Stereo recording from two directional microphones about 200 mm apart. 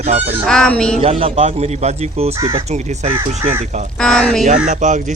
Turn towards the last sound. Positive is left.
turn(degrees=-35)  # may be behind; listen again after turning